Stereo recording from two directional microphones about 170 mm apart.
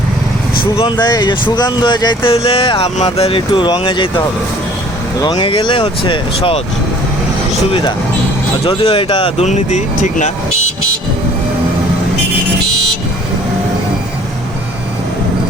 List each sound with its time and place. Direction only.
0.6 s speech: 30° left (ahead or behind)
5.2 s speech: 25° left (ahead or behind)
8.6 s speech: 35° left (ahead or behind)
9.5 s speech: 40° left (ahead or behind)